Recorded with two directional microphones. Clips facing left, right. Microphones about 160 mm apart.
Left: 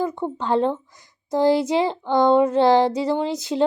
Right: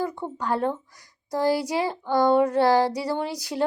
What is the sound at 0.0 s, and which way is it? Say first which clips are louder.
Speech: left 4 dB; 20° left (ahead or behind).